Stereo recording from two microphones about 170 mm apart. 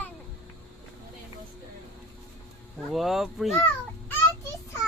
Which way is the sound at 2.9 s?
Centre (ahead or behind).